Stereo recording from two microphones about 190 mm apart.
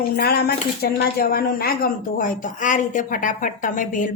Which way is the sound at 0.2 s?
55° left (ahead or behind).